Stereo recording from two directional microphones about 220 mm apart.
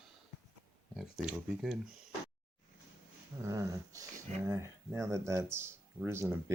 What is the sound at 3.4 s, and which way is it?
Speech, 15° right (ahead or behind).